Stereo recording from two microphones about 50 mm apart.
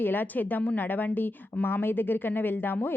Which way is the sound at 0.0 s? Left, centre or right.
Left.